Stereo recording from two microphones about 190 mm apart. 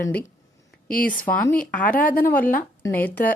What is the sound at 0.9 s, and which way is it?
Speech, 50° left (ahead or behind).